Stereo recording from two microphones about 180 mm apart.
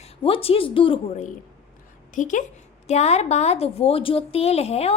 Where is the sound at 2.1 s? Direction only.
45° left (ahead or behind).